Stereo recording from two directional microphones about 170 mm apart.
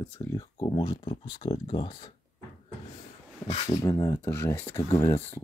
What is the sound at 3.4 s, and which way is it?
Speech, 35° left (ahead or behind).